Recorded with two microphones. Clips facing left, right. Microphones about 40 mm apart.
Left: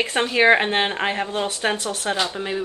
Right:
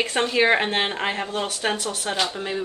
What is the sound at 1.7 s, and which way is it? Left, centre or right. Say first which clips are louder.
Speech: left 2 dB; left.